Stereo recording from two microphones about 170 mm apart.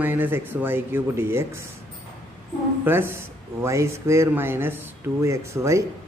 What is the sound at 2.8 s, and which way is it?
Speech, 10° right (ahead or behind).